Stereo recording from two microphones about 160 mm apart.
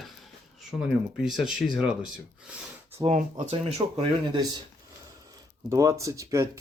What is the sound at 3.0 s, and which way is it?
Speech, 50° right (ahead or behind).